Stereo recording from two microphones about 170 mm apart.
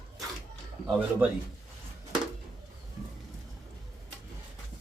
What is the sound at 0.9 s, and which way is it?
Speech, 10° right (ahead or behind).